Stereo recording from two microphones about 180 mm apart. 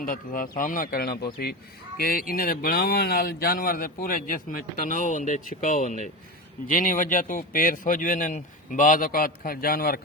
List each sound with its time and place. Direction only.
0.0 s speech: 50° left (ahead or behind)